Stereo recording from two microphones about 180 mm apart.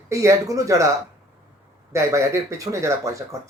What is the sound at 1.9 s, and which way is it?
Speech, 15° right (ahead or behind).